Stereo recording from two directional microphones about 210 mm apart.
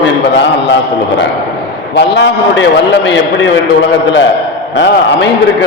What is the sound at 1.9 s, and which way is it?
A man's voice, 55° left (ahead or behind).